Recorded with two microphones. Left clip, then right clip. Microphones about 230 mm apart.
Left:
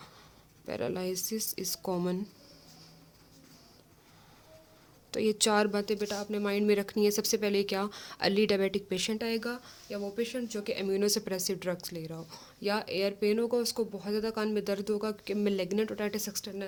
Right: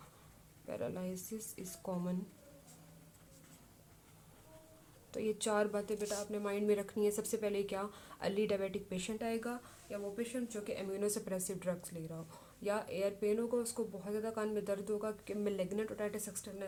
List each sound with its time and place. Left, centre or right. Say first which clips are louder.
0.7 s speech: left 8 dB; left
5.1 s speech: left 8 dB; left